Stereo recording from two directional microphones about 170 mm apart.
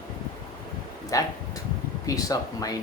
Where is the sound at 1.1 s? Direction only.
20° left (ahead or behind).